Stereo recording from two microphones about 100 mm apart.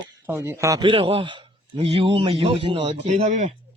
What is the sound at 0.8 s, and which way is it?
Speech, 60° right (ahead or behind).